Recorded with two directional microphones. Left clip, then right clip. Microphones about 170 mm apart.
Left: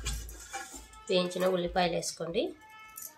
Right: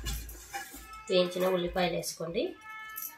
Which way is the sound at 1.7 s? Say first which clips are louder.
Left 1 dB; centre (ahead or behind).